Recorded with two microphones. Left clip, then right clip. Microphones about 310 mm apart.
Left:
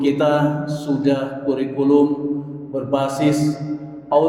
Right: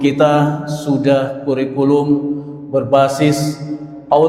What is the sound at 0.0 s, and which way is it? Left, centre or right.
A man's voice, right.